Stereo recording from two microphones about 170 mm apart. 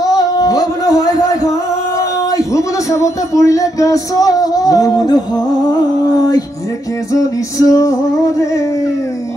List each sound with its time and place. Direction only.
0.0 s a sound: 20° left (ahead or behind)
2.3 s speech: 20° left (ahead or behind)
7.1 s speech: 20° left (ahead or behind)